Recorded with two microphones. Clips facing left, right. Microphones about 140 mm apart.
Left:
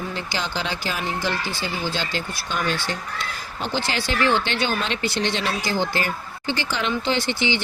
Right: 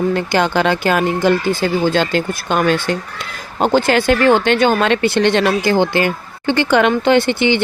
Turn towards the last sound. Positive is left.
turn(degrees=-55)  # may be behind; listen again after turning